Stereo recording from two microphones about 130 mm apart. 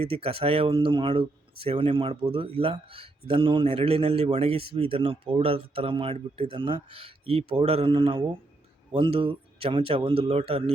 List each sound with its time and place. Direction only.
0.0 s speech: 50° right (ahead or behind)